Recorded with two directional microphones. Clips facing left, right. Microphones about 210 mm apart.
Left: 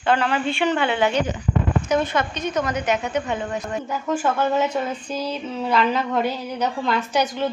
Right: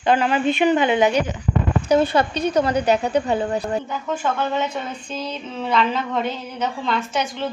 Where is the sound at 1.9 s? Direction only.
35° right (ahead or behind).